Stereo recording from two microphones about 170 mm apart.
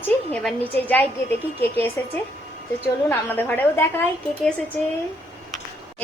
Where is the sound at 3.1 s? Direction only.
10° left (ahead or behind).